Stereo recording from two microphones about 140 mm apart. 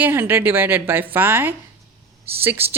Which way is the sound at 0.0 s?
15° right (ahead or behind).